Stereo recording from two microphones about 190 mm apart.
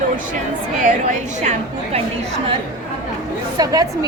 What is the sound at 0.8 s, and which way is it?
Speech, 40° right (ahead or behind).